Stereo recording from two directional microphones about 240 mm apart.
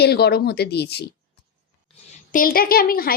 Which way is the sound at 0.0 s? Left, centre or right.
Left.